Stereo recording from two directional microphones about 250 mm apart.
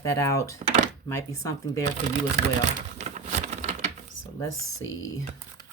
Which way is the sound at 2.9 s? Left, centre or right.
Right.